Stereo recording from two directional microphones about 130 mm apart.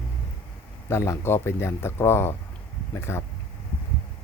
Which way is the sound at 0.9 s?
20° left (ahead or behind).